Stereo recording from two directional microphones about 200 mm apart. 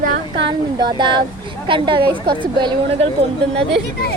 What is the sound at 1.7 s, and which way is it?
Speech, 25° right (ahead or behind).